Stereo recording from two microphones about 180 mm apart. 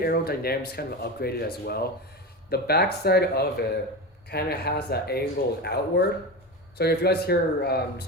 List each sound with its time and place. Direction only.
0.0 s speech: 55° left (ahead or behind)